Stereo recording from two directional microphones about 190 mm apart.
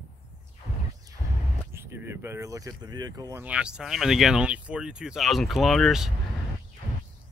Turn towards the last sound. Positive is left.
turn(degrees=0)  # may be behind; listen again after turning